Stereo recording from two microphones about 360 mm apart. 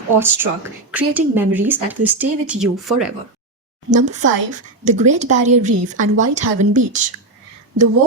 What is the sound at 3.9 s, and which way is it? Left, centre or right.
Speech, centre.